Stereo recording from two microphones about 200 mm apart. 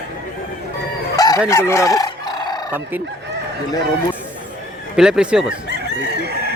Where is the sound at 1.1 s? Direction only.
20° left (ahead or behind).